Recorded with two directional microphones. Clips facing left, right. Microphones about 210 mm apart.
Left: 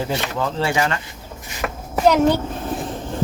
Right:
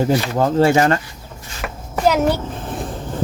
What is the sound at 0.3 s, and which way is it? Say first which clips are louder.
Speech: right 7 dB; 45° right (ahead or behind).